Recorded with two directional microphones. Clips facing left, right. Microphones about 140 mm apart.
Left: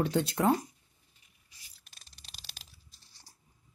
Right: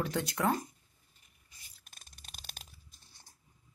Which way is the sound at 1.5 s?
50° right (ahead or behind).